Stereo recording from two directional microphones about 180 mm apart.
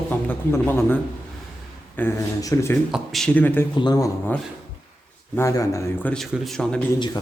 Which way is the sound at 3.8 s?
20° left (ahead or behind).